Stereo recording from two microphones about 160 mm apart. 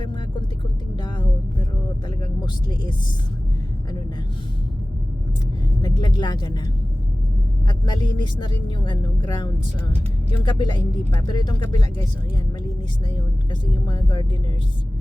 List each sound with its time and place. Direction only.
0.9 s a sound: 30° left (ahead or behind)
2.4 s speech: 25° left (ahead or behind)
5.8 s speech: 30° left (ahead or behind)
7.7 s speech: 30° left (ahead or behind)
13.1 s speech: 30° left (ahead or behind)